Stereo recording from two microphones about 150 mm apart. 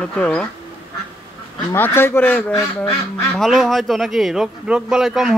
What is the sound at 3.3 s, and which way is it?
Speech, centre (ahead or behind).